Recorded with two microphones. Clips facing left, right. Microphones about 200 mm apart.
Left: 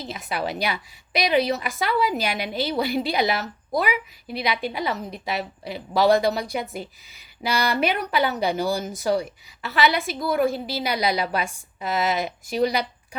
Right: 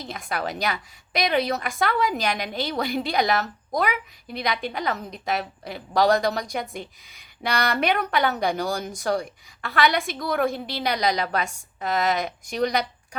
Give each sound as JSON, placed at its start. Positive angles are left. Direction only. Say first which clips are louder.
{"t": 0.0, "sound": "a woman's voice", "louder": "left 1 dB", "side_deg": 5}
{"t": 0.4, "sound": "a woman's voice", "louder": "left 2 dB", "side_deg": -45}
{"t": 1.4, "sound": "a woman's voice", "louder": "left 1 dB", "side_deg": 5}